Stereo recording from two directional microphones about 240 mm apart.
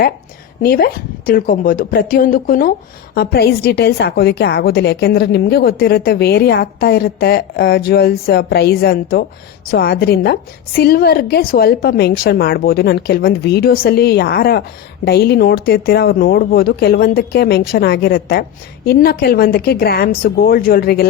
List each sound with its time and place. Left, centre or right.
0.6 s a woman's voice: left